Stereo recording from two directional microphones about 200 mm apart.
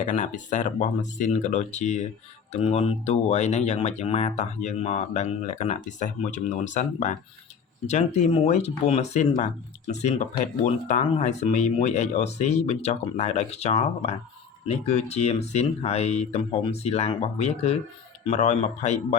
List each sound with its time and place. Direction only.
0.0 s speech: 40° left (ahead or behind)